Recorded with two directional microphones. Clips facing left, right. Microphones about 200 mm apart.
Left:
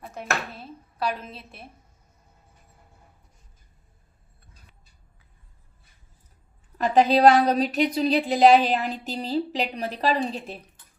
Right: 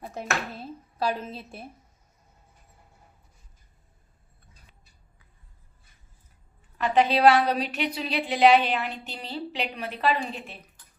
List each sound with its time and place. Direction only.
6.7 s a woman's voice: 40° left (ahead or behind)